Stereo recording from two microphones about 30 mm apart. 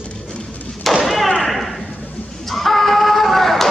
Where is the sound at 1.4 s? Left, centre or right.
Centre.